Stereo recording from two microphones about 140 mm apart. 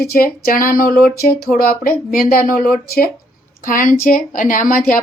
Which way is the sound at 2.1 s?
90° left.